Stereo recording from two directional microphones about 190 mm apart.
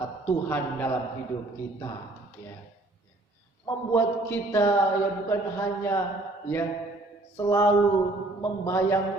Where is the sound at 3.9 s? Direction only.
10° left (ahead or behind).